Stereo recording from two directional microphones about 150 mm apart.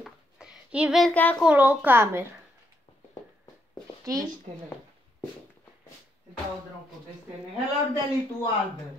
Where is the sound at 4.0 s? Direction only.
25° right (ahead or behind).